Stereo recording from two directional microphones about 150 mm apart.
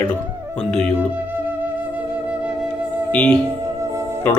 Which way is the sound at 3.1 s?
5° left (ahead or behind).